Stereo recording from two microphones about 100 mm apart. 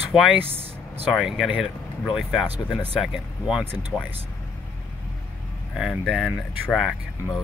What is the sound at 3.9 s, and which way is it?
Speech, 15° left (ahead or behind).